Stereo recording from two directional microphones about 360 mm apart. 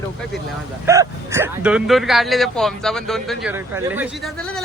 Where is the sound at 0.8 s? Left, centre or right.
Centre.